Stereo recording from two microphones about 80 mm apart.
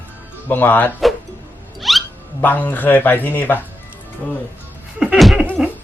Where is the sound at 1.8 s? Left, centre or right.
Centre.